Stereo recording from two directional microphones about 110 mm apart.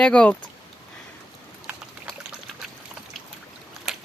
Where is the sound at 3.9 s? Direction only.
5° right (ahead or behind).